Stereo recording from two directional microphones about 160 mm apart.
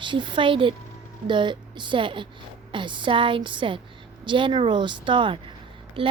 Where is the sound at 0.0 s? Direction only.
30° right (ahead or behind).